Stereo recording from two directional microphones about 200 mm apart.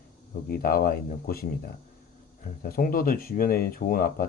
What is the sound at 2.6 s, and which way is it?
Speech, 45° left (ahead or behind).